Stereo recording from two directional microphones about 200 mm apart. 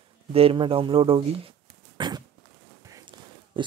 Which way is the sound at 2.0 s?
20° right (ahead or behind).